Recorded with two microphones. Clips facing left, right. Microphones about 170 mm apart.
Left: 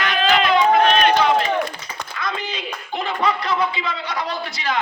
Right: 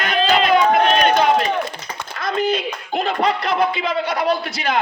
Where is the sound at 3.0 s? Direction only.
45° right (ahead or behind).